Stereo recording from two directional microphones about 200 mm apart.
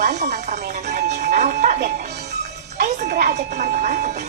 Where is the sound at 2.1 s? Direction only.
55° right (ahead or behind).